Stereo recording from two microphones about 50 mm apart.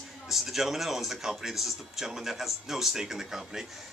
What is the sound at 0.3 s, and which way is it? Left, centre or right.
Speech, centre.